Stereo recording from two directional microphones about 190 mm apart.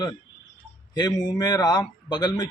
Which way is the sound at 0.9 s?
20° left (ahead or behind).